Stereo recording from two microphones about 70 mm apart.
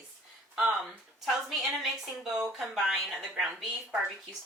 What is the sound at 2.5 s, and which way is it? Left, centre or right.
A woman's voice, centre.